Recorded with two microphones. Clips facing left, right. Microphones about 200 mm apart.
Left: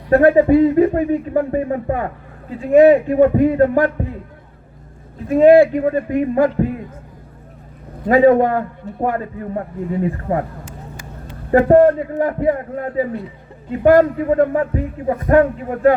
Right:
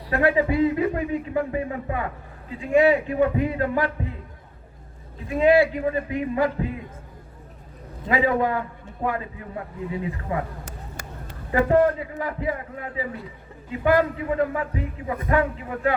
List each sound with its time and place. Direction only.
0.1 s a man's voice: 45° left (ahead or behind)
5.3 s a man's voice: 50° left (ahead or behind)
8.0 s a man's voice: 45° left (ahead or behind)
11.5 s a man's voice: 50° left (ahead or behind)